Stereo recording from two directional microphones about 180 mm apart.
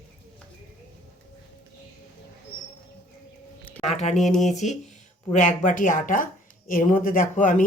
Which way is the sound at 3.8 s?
40° left (ahead or behind).